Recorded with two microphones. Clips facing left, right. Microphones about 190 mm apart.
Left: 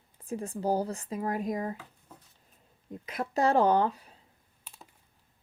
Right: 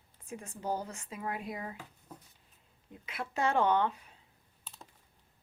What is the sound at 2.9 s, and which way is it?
Speech, 40° left (ahead or behind).